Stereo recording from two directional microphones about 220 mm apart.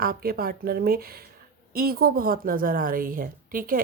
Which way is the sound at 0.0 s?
40° right (ahead or behind).